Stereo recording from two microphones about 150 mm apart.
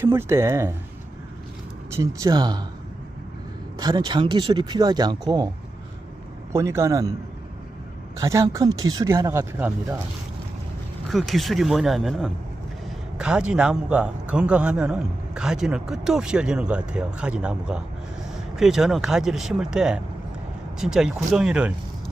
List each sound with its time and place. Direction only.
0.0 s speech: 15° right (ahead or behind)
1.9 s speech: 20° right (ahead or behind)
3.8 s speech: 30° right (ahead or behind)
6.5 s speech: 20° right (ahead or behind)
8.2 s speech: 20° right (ahead or behind)
11.1 s a man's voice: centre (ahead or behind)